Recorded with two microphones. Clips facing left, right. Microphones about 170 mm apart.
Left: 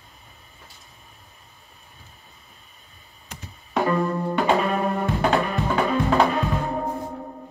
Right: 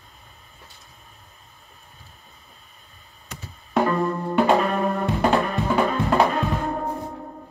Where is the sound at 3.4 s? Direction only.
Centre (ahead or behind).